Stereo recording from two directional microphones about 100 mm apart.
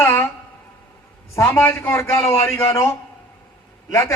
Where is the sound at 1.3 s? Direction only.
20° left (ahead or behind).